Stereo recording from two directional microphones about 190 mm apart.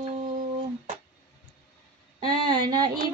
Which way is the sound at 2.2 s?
25° right (ahead or behind).